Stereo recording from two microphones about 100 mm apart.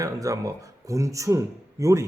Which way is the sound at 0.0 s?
35° right (ahead or behind).